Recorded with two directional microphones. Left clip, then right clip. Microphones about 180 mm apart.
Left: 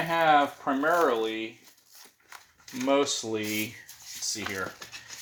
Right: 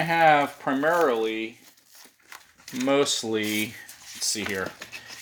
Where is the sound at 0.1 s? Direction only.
45° right (ahead or behind).